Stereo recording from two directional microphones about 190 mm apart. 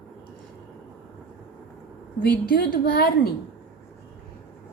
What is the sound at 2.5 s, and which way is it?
Speech, 50° left (ahead or behind).